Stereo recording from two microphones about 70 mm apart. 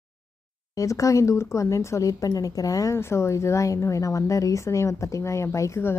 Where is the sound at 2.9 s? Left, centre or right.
Left.